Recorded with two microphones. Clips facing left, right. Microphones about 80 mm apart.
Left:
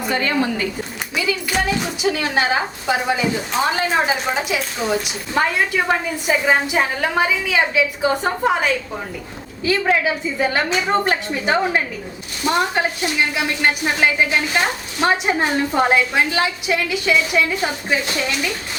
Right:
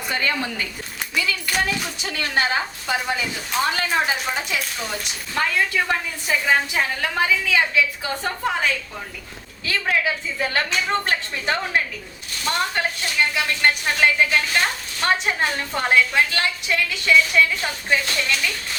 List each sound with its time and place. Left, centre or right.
0.1 s a woman's voice: left
1.1 s clapping: centre
2.0 s a woman's voice: centre
10.0 s a woman's voice: centre